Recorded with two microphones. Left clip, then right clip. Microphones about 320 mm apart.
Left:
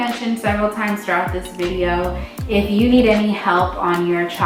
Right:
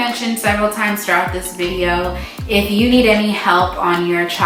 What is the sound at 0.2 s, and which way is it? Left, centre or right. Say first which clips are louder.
A woman's voice: right 3 dB; centre.